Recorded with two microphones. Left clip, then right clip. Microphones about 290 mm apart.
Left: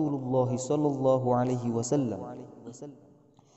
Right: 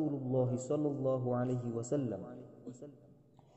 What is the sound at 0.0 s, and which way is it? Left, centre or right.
A man's voice, left.